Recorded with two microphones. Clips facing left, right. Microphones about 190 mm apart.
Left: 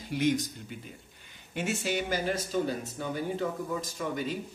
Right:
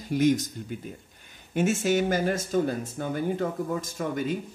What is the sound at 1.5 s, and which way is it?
Speech, 45° right (ahead or behind).